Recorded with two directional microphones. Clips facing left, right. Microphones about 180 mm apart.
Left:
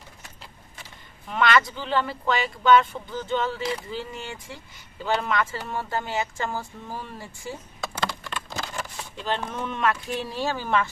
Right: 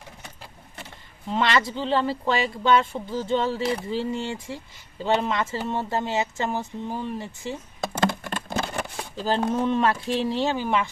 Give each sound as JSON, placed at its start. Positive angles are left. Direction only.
{"t": 1.3, "sound": "speech", "side_deg": -25}
{"t": 7.9, "sound": "patter", "side_deg": -50}
{"t": 9.1, "sound": "speech", "side_deg": -35}